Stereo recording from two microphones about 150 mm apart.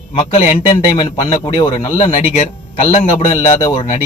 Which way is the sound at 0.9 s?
40° left (ahead or behind).